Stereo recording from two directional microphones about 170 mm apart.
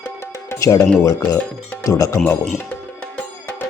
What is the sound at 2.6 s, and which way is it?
Music, 10° left (ahead or behind).